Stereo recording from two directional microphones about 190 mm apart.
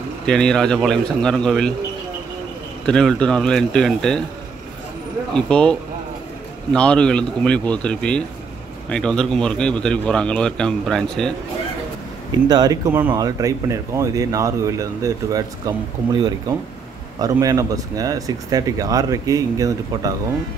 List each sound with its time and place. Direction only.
0.3 s a man's voice: 5° left (ahead or behind)
2.9 s a man's voice: 5° left (ahead or behind)
5.3 s a man's voice: 5° left (ahead or behind)
12.3 s speech: 20° right (ahead or behind)